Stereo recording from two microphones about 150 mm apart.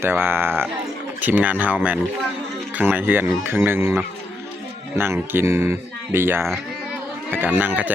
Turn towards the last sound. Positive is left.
turn(degrees=-10)  # may be behind; listen again after turning